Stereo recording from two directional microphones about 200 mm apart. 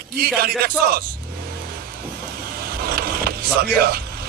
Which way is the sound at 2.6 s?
50° right (ahead or behind).